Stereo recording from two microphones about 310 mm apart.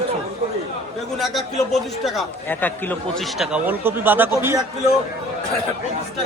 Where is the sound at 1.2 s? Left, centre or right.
Centre.